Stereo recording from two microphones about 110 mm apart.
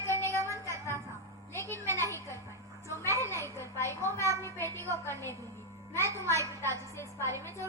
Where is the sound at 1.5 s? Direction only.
25° left (ahead or behind).